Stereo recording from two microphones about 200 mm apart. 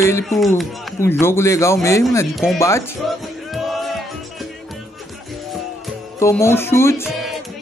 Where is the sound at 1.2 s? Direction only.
15° left (ahead or behind).